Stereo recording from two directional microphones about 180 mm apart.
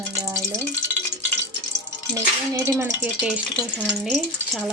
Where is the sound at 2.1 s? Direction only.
15° right (ahead or behind).